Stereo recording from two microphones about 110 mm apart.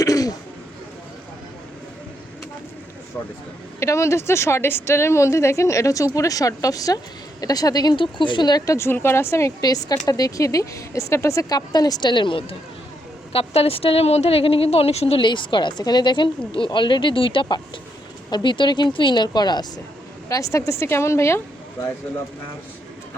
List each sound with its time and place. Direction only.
0.0 s a sound: 35° left (ahead or behind)
3.8 s a woman's voice: 25° left (ahead or behind)
9.6 s a woman's voice: 35° left (ahead or behind)
20.2 s a woman's voice: 30° left (ahead or behind)